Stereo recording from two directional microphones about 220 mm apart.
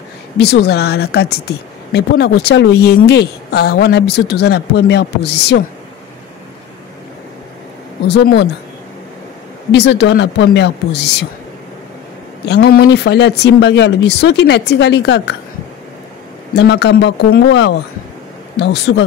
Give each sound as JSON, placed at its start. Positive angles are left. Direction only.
{"t": 0.4, "sound": "speech", "side_deg": 50}
{"t": 8.1, "sound": "speech", "side_deg": 50}
{"t": 9.7, "sound": "speech", "side_deg": 50}
{"t": 12.4, "sound": "speech", "side_deg": 45}
{"t": 16.5, "sound": "speech", "side_deg": 50}